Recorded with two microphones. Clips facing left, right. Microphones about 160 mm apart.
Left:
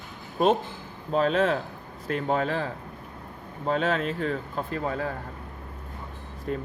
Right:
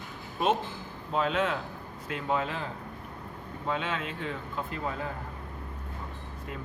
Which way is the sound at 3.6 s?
40° left (ahead or behind).